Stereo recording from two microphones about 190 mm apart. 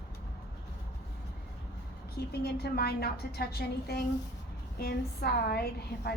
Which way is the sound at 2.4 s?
55° left (ahead or behind).